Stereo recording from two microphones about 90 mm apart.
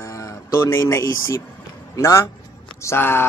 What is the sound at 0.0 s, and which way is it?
Speech, 35° left (ahead or behind).